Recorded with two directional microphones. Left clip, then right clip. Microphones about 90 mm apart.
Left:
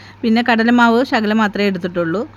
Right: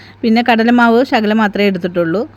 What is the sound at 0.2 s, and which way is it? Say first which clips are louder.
Speech: right 3 dB; 20° right (ahead or behind).